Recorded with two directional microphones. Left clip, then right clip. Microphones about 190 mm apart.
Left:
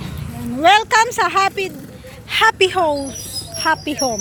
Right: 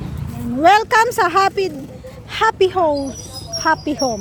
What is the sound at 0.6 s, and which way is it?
Speech, 25° right (ahead or behind).